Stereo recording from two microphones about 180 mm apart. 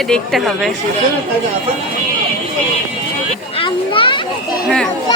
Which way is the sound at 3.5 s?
30° left (ahead or behind).